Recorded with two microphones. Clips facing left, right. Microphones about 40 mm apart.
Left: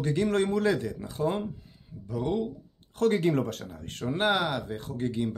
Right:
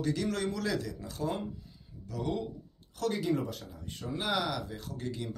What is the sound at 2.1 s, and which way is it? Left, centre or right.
Speech, centre.